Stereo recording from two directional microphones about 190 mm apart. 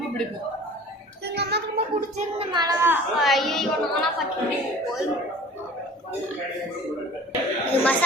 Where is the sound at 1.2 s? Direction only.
60° right (ahead or behind).